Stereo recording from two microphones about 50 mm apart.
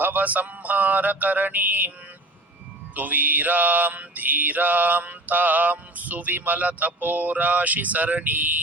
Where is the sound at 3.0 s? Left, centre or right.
Right.